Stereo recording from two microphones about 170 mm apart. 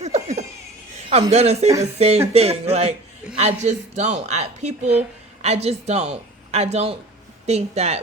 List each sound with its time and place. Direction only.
0.0 s laughter: 40° right (ahead or behind)
1.3 s speech: 40° right (ahead or behind)